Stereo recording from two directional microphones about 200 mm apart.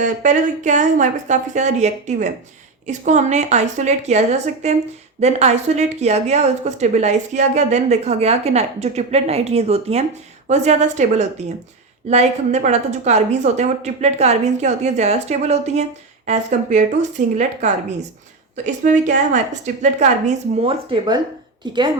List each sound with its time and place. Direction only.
0.0 s a woman's voice: 40° right (ahead or behind); by 21.8 s 20° right (ahead or behind)